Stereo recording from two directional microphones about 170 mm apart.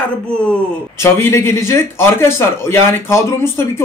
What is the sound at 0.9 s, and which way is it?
A man's voice, 15° left (ahead or behind).